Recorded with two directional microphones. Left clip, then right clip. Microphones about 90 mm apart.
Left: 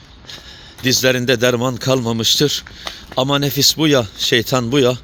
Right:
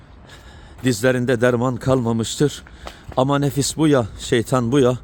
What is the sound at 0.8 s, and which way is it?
Speech, 45° right (ahead or behind).